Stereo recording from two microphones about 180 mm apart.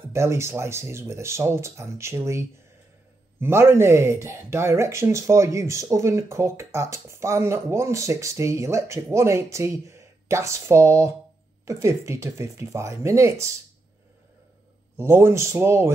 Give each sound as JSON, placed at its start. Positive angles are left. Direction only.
{"t": 0.1, "sound": "speech", "side_deg": -15}
{"t": 15.0, "sound": "speech", "side_deg": -15}